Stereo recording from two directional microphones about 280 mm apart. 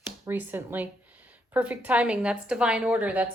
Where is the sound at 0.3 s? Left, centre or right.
Centre.